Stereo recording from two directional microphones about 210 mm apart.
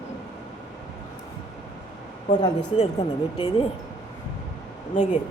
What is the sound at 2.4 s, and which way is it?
Speech, 30° left (ahead or behind).